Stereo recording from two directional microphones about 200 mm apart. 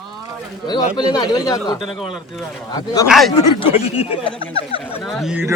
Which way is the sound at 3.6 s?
30° left (ahead or behind).